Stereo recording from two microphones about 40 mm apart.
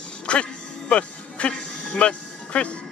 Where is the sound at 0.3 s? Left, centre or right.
Left.